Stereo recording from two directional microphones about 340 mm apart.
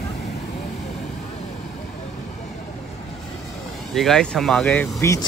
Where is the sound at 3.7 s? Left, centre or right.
Centre.